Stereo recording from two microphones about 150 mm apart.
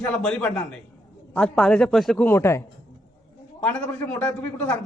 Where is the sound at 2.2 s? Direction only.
15° left (ahead or behind).